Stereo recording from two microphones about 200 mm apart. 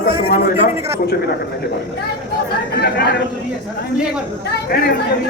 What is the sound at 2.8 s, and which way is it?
Speech, 55° left (ahead or behind).